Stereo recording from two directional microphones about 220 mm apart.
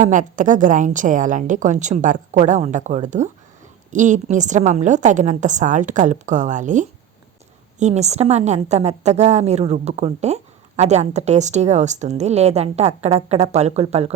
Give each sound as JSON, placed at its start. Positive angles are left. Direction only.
{"t": 0.0, "sound": "a woman's voice", "side_deg": -35}